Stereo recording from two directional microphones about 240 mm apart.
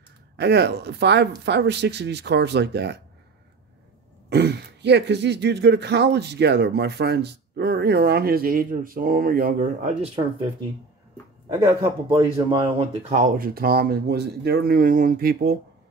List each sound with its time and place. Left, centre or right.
0.4 s speech: right
4.3 s speech: right
11.4 s speech: centre; by 15.5 s right